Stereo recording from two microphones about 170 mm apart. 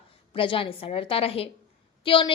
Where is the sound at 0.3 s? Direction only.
30° left (ahead or behind).